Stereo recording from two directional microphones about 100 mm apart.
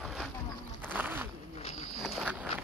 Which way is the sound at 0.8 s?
20° right (ahead or behind).